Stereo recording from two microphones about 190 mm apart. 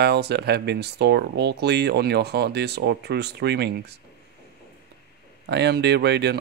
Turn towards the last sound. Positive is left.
turn(degrees=-60)  # may be behind; listen again after turning